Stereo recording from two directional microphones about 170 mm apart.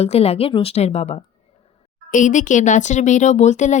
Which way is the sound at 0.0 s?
40° left (ahead or behind).